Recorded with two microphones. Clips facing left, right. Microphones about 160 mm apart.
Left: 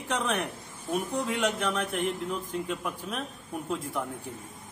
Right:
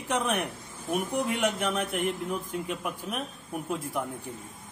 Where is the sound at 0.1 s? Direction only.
15° right (ahead or behind).